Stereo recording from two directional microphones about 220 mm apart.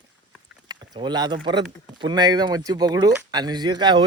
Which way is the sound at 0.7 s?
20° right (ahead or behind).